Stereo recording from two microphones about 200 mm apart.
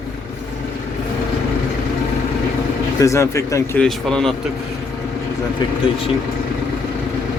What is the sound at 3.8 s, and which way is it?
Speech, 5° left (ahead or behind).